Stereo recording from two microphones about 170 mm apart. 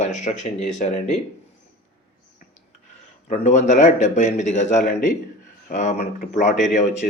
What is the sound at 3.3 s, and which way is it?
Speech, 45° left (ahead or behind).